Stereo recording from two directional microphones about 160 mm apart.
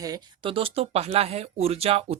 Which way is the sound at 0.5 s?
35° right (ahead or behind).